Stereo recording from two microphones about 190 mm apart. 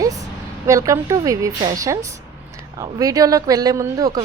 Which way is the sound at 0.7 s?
15° right (ahead or behind).